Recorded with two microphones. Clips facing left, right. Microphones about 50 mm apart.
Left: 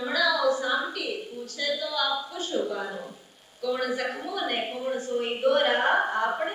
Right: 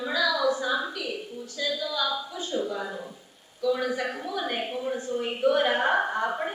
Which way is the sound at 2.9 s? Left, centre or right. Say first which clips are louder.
Even; centre.